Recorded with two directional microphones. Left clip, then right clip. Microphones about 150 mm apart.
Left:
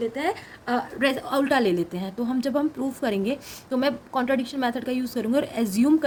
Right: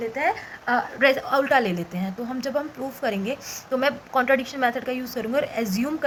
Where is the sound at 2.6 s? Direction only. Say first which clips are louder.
Left 1 dB; 60° left (ahead or behind).